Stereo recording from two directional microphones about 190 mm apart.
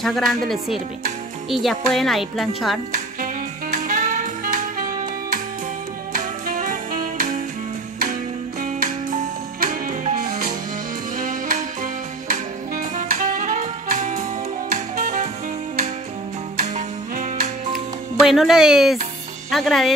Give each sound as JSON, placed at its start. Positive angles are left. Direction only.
{"t": 0.0, "sound": "speech", "side_deg": 0}
{"t": 1.5, "sound": "speech", "side_deg": 0}
{"t": 3.7, "sound": "music", "side_deg": -45}
{"t": 16.6, "sound": "music", "side_deg": -40}
{"t": 18.2, "sound": "speech", "side_deg": 0}